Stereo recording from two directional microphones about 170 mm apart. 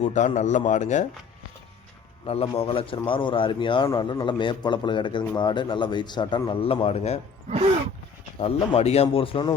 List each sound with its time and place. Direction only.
0.0 s a man's voice: 45° left (ahead or behind)
2.2 s a man's voice: 35° left (ahead or behind)
8.4 s speech: 35° left (ahead or behind)